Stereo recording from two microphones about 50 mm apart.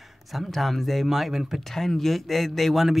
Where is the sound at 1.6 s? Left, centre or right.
Centre.